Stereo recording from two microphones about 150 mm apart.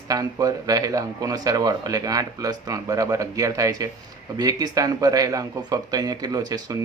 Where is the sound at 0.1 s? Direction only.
25° right (ahead or behind).